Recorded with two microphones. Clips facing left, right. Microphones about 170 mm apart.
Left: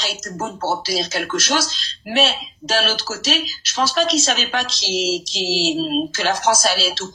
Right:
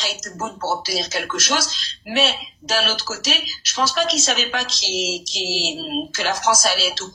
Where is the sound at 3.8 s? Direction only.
30° left (ahead or behind).